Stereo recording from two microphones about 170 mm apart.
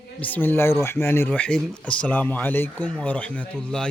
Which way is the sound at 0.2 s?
10° left (ahead or behind).